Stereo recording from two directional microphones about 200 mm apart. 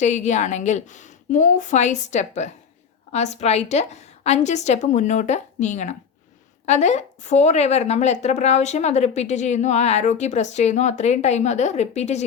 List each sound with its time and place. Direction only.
0.0 s a woman's voice: 35° left (ahead or behind)